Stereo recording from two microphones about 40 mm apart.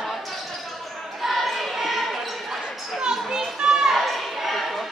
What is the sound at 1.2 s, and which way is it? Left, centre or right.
Basketball bounce, centre.